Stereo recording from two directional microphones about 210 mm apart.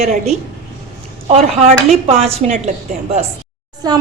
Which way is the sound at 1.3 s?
30° right (ahead or behind).